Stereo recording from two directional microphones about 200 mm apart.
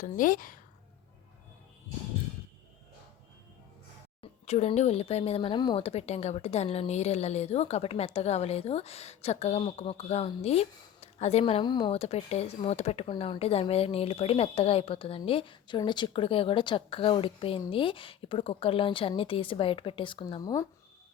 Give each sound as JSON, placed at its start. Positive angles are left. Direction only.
{"t": 0.0, "sound": "a woman's voice", "side_deg": 40}
{"t": 4.2, "sound": "speech", "side_deg": 35}